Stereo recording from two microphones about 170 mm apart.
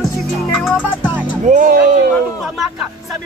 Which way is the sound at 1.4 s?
50° right (ahead or behind).